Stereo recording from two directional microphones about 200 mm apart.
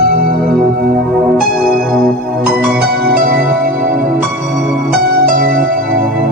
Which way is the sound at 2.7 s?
50° right (ahead or behind).